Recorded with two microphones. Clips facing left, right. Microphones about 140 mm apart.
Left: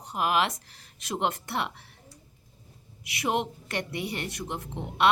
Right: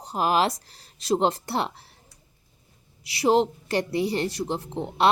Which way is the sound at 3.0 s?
30° right (ahead or behind).